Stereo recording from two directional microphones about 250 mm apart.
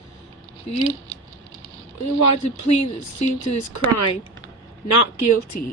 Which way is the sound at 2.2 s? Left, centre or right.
Left.